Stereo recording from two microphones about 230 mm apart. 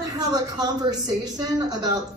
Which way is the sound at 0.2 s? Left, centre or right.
Centre.